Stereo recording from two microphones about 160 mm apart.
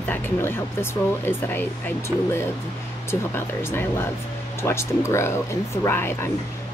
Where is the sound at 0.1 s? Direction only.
15° left (ahead or behind).